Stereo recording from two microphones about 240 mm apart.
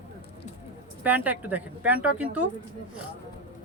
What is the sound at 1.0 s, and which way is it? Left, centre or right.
A woman's voice, centre.